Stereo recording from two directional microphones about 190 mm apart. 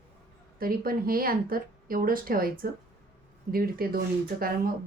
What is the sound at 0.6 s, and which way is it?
Speech, 50° right (ahead or behind).